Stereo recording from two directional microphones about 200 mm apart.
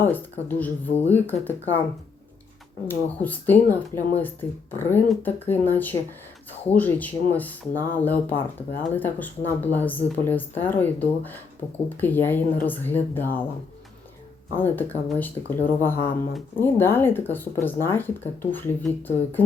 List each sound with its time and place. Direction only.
0.0 s speech: 10° left (ahead or behind)
2.8 s speech: 10° left (ahead or behind)
14.5 s speech: 10° left (ahead or behind)